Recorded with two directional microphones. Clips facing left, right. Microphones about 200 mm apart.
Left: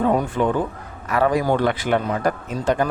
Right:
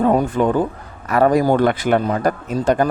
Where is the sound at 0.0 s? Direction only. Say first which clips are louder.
Right 3 dB; 40° right (ahead or behind).